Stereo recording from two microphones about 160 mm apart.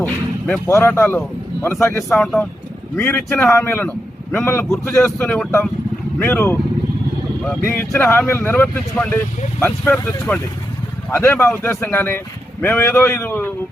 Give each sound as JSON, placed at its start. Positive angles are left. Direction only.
{"t": 0.0, "sound": "a man's voice", "side_deg": 10}
{"t": 2.2, "sound": "a man's voice", "side_deg": 5}
{"t": 7.7, "sound": "a man's voice", "side_deg": 10}